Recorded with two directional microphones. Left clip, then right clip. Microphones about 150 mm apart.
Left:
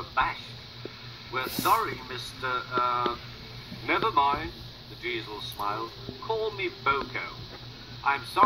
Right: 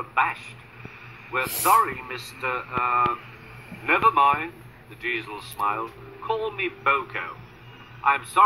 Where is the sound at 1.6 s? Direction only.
15° left (ahead or behind).